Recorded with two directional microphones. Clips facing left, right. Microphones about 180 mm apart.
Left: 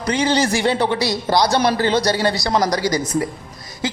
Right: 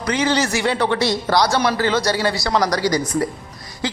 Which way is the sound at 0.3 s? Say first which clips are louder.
Left 2 dB; 30° left (ahead or behind).